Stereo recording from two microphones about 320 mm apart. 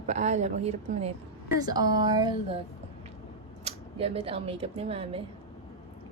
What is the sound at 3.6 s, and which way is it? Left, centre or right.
Speech, centre.